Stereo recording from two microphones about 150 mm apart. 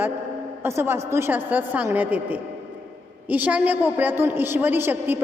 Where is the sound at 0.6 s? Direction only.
15° right (ahead or behind).